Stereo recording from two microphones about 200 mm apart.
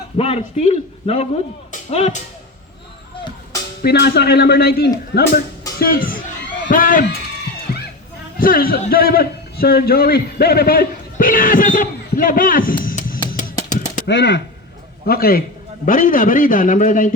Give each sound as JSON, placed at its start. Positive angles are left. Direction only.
{"t": 0.2, "sound": "a man's voice", "side_deg": 30}
{"t": 3.8, "sound": "a man's voice", "side_deg": 55}
{"t": 5.8, "sound": "a man's voice", "side_deg": 45}
{"t": 8.4, "sound": "a man's voice", "side_deg": 45}
{"t": 13.7, "sound": "a sound", "side_deg": 40}
{"t": 14.1, "sound": "speech", "side_deg": 60}
{"t": 15.0, "sound": "a man's voice", "side_deg": 50}